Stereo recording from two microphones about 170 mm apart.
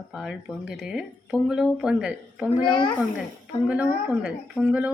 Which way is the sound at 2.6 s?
25° left (ahead or behind).